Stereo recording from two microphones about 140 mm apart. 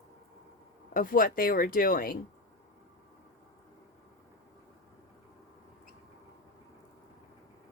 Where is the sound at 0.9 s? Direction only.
90° left.